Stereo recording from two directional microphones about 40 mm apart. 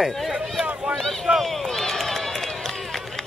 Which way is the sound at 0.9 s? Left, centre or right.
Centre.